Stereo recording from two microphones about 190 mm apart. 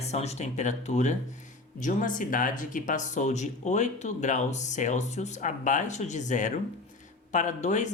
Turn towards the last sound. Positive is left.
turn(degrees=40)  # may be behind; listen again after turning